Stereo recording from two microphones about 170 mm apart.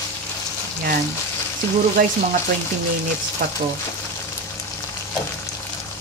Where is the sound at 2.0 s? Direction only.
55° right (ahead or behind).